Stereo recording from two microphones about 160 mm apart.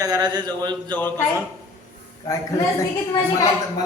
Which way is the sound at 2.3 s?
20° left (ahead or behind).